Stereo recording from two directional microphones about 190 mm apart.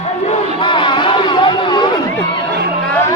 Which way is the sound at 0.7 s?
25° left (ahead or behind).